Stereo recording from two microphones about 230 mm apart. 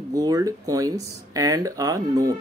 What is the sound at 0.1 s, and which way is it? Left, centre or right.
Speech, centre.